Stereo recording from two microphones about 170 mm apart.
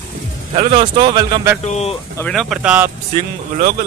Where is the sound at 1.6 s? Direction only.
40° left (ahead or behind).